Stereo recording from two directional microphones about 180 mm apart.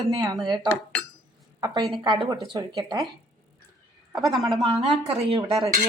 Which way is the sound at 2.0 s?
25° right (ahead or behind).